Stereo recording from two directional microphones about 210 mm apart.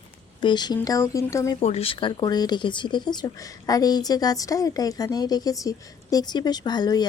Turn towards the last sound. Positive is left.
turn(degrees=20)  # may be behind; listen again after turning